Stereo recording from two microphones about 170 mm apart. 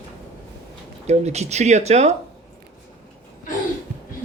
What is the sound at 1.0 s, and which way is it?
Speech, 40° right (ahead or behind).